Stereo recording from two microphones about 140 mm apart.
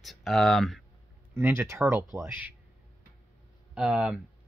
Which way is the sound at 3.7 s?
5° right (ahead or behind).